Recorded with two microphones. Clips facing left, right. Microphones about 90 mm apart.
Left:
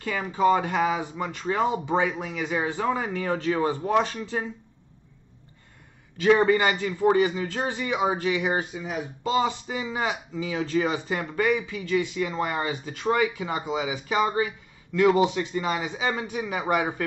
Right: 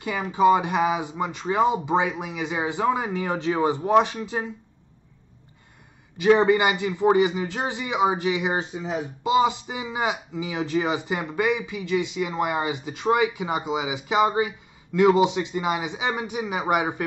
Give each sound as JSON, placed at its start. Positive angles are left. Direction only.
{"t": 0.0, "sound": "a man's voice", "side_deg": -15}
{"t": 6.1, "sound": "a man's voice", "side_deg": -20}